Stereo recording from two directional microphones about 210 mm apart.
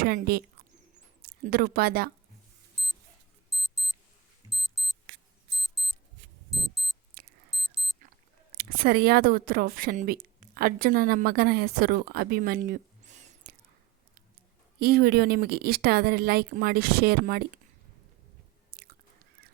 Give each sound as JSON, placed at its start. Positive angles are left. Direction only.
{"t": 0.0, "sound": "speech", "side_deg": -45}
{"t": 2.8, "sound": "alarm clock", "side_deg": 0}
{"t": 4.6, "sound": "music", "side_deg": 0}
{"t": 5.6, "sound": "alarm clock", "side_deg": 0}
{"t": 6.5, "sound": "a sound", "side_deg": 0}
{"t": 7.2, "sound": "alarm clock", "side_deg": -45}
{"t": 7.5, "sound": "alarm clock", "side_deg": 0}
{"t": 8.5, "sound": "speech", "side_deg": -45}
{"t": 14.8, "sound": "speech", "side_deg": -45}
{"t": 18.7, "sound": "chewing", "side_deg": -50}